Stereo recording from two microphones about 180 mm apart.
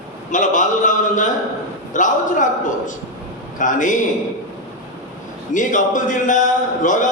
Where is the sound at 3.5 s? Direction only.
45° left (ahead or behind).